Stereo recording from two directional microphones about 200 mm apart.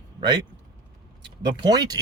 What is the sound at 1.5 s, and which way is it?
Speech, 20° right (ahead or behind).